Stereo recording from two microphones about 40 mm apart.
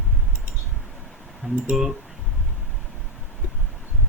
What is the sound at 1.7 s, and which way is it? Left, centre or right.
Speech, centre.